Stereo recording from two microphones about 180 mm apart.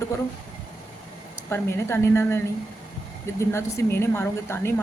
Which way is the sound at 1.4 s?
15° left (ahead or behind).